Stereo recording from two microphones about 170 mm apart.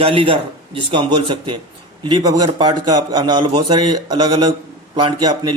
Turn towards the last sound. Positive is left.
turn(degrees=-25)  # may be behind; listen again after turning